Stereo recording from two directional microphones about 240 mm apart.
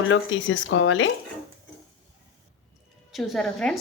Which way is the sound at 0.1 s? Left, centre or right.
Left.